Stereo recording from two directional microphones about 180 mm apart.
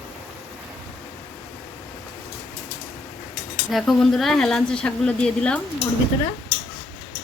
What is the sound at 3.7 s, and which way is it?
Speech, centre (ahead or behind).